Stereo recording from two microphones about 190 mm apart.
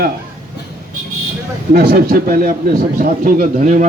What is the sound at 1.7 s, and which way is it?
Speech, 50° right (ahead or behind).